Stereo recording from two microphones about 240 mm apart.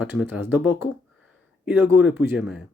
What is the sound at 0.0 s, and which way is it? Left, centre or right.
Speech, centre.